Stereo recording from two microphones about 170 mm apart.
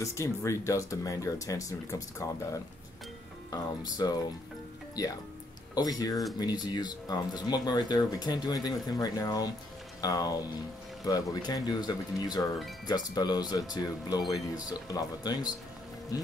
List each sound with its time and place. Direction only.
0.0 s speech: 15° left (ahead or behind)
3.4 s speech: 20° left (ahead or behind)
5.8 s speech: 20° left (ahead or behind)